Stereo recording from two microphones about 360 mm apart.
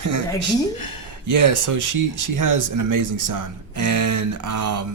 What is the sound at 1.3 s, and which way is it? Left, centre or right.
Speech, right.